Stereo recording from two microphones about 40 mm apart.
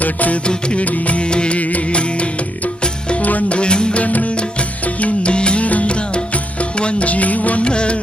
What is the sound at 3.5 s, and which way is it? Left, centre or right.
Music, left.